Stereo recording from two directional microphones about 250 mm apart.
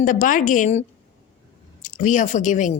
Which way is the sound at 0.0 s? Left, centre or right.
Left.